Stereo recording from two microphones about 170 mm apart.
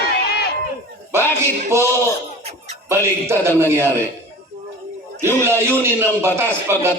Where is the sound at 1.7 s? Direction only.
15° right (ahead or behind).